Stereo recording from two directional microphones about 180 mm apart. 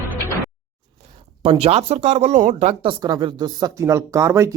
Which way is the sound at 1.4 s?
30° right (ahead or behind).